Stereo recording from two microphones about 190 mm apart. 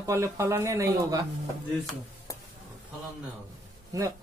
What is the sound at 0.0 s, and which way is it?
Speech, 15° right (ahead or behind).